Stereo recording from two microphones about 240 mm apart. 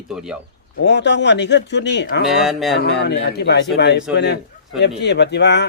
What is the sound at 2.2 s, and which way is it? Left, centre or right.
Speech, centre.